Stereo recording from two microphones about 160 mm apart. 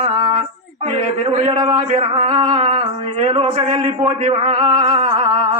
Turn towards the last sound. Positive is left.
turn(degrees=-45)  # may be behind; listen again after turning